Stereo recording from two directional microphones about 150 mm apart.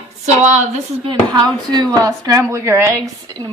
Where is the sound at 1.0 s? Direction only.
25° right (ahead or behind).